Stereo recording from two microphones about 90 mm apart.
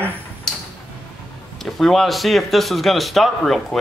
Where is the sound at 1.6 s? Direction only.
Centre (ahead or behind).